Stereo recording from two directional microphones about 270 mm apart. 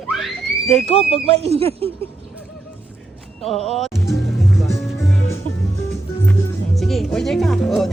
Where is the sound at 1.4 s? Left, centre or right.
Right.